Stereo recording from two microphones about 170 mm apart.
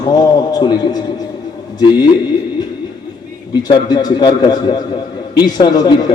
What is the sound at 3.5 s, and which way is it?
A man's voice, 25° left (ahead or behind).